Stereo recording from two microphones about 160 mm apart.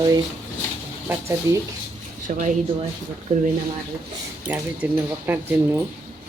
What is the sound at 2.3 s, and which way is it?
Speech, 55° right (ahead or behind).